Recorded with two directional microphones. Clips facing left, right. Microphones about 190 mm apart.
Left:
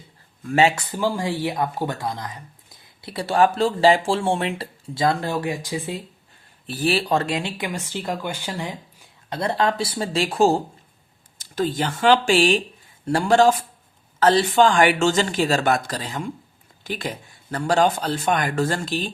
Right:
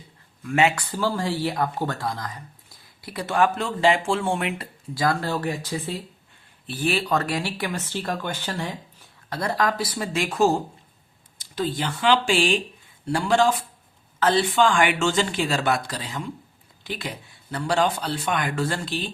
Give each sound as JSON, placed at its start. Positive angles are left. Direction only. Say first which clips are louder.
{"t": 0.4, "sound": "a man's voice", "louder": "left 2 dB", "side_deg": 35}
{"t": 0.9, "sound": "speech", "louder": "left 1 dB", "side_deg": 15}
{"t": 6.7, "sound": "speech", "louder": "left 3 dB", "side_deg": 35}
{"t": 11.3, "sound": "a man's voice", "louder": "left 3 dB", "side_deg": 45}